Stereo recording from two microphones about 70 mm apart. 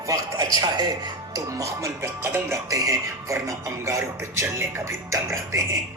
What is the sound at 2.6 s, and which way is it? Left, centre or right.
Speech, right.